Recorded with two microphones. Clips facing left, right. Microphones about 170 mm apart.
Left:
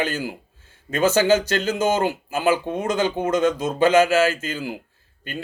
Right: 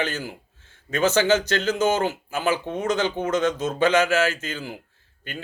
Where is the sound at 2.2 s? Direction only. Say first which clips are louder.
Left 4 dB; 55° left (ahead or behind).